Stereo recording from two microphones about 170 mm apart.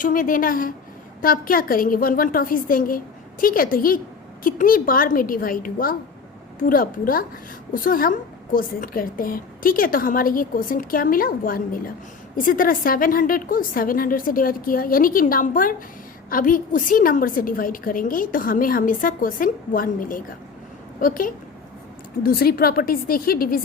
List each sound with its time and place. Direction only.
0.0 s a woman's voice: 55° left (ahead or behind)